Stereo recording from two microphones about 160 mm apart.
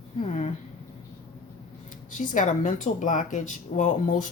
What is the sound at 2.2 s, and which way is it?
Speech, 50° left (ahead or behind).